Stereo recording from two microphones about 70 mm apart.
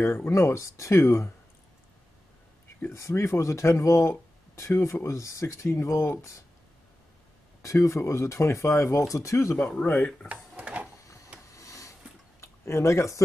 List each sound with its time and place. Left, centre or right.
0.0 s speech: left
2.9 s speech: left
7.6 s speech: left
10.2 s drawer open or close: centre
11.5 s a sound: left
12.4 s speech: left